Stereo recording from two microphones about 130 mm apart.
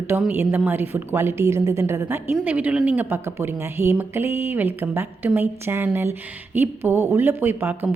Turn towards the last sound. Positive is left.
turn(degrees=-15)  # may be behind; listen again after turning